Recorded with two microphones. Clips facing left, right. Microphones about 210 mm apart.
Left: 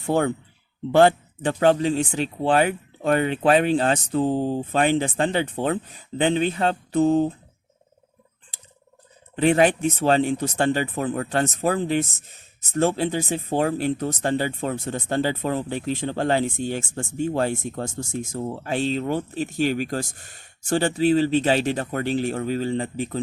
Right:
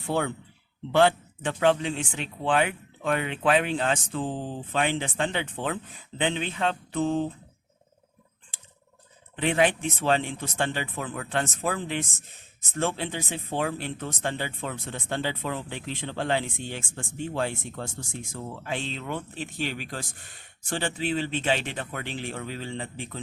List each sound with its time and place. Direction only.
0.0 s speech: 45° left (ahead or behind)
9.3 s speech: 40° left (ahead or behind)